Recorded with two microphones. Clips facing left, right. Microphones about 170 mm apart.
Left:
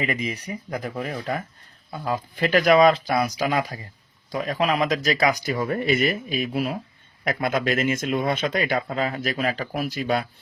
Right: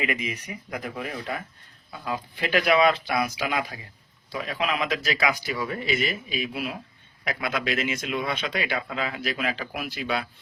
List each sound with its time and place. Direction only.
0.0 s speech: 35° left (ahead or behind)